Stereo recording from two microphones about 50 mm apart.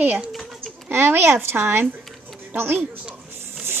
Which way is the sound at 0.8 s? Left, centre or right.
Right.